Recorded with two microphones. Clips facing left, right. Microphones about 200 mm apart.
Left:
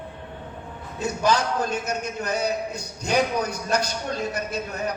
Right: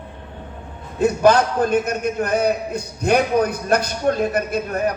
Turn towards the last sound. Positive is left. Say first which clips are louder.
# right 7 dB
turn(degrees=-55)  # may be behind; listen again after turning